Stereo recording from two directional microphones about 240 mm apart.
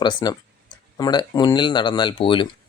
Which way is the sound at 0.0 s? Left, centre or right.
Centre.